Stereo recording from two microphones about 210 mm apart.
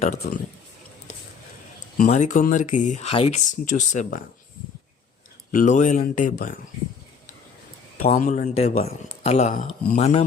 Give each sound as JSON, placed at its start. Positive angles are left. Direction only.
{"t": 0.0, "sound": "a man's voice", "side_deg": 30}
{"t": 2.0, "sound": "a man's voice", "side_deg": 35}
{"t": 5.5, "sound": "a man's voice", "side_deg": 35}
{"t": 8.0, "sound": "a man's voice", "side_deg": 35}